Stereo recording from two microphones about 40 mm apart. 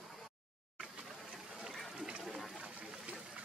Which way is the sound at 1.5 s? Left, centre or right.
Centre.